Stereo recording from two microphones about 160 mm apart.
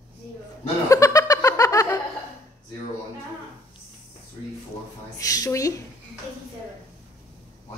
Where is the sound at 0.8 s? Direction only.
20° left (ahead or behind).